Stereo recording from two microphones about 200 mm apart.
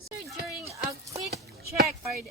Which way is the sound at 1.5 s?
50° right (ahead or behind).